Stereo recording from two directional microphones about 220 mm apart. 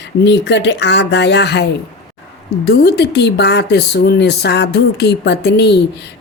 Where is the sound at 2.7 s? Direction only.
50° left (ahead or behind).